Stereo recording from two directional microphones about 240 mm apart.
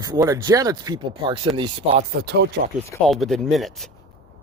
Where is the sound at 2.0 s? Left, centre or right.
Right.